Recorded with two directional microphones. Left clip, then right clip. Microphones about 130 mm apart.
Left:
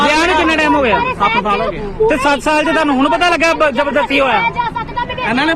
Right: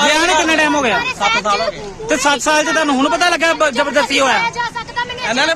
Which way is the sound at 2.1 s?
45° right (ahead or behind).